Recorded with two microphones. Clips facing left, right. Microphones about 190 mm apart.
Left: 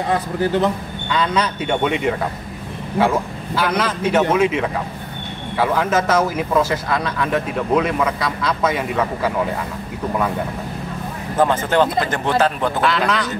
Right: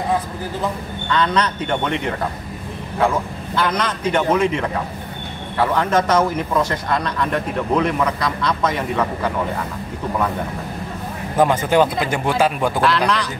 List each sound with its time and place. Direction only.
0.1 s a man's voice: 75° left (ahead or behind)
1.0 s a man's voice: 10° left (ahead or behind)
3.5 s a man's voice: 5° left (ahead or behind)
11.3 s speech: 10° right (ahead or behind)
12.8 s a man's voice: centre (ahead or behind)